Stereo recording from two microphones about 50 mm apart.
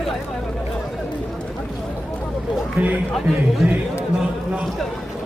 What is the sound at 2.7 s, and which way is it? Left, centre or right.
Speech, right.